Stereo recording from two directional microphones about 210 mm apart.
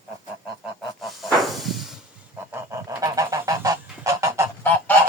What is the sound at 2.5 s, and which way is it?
Goose, 15° right (ahead or behind).